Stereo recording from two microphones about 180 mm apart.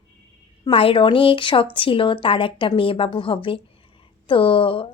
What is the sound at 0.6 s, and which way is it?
A woman's voice, 30° left (ahead or behind).